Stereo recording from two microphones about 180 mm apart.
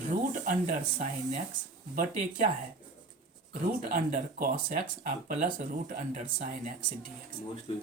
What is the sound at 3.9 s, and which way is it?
Speech, 50° right (ahead or behind).